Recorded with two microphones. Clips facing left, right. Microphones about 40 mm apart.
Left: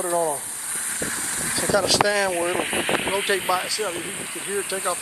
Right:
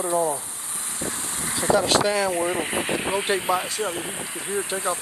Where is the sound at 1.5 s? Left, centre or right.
Right.